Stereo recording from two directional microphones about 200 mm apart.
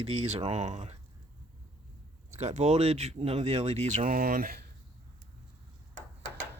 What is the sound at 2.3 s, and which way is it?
Speech, 35° right (ahead or behind).